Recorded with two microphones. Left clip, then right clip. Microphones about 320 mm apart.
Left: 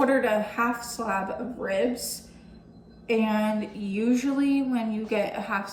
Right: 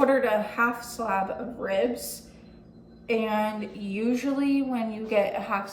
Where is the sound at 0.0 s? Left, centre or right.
Centre.